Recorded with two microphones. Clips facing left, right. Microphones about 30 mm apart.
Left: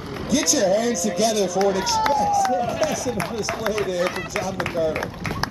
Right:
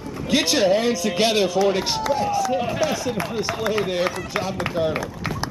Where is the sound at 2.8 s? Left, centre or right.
Centre.